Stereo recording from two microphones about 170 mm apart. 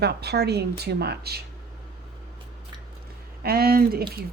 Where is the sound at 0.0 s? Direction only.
75° right (ahead or behind).